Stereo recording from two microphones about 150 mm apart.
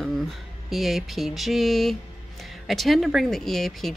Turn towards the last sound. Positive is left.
turn(degrees=0)  # may be behind; listen again after turning